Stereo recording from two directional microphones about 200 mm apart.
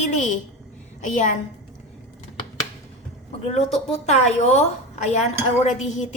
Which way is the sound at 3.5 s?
30° left (ahead or behind).